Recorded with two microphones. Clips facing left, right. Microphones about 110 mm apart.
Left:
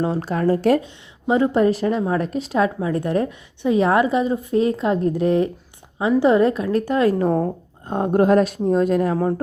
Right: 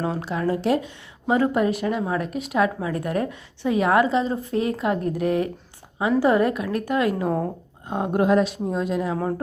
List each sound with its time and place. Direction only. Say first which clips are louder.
0.0 s a woman's voice: left 4 dB; 35° left (ahead or behind)
0.8 s a woman's voice: even; 25° left (ahead or behind); by 9.1 s 50° left (ahead or behind)